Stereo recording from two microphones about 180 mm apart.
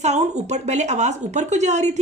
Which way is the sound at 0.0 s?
40° right (ahead or behind).